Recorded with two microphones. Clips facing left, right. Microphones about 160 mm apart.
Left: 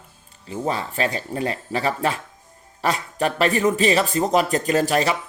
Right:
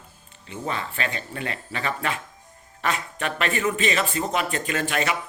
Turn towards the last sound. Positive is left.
turn(degrees=35)  # may be behind; listen again after turning